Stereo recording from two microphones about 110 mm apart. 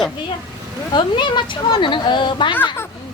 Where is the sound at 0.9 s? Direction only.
45° left (ahead or behind).